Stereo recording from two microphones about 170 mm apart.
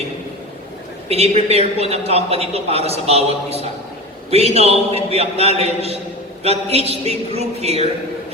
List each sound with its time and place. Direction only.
1.0 s a woman's voice: 35° right (ahead or behind)